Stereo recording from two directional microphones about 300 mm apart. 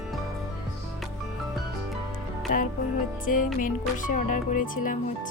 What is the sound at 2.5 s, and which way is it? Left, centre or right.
Speech, left.